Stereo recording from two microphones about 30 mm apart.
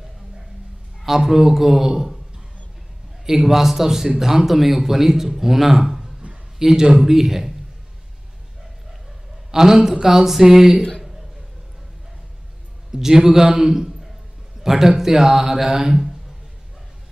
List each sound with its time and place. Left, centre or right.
1.0 s speech: centre
3.4 s speech: centre
9.5 s speech: centre
11.0 s a sound: centre
12.9 s speech: centre